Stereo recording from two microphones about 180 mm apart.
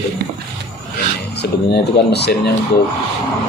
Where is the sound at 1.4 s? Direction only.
70° left (ahead or behind).